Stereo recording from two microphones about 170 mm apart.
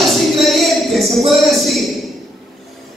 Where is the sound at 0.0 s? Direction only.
Centre (ahead or behind).